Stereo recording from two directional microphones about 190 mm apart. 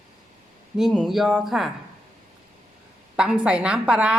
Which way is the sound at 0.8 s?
Centre (ahead or behind).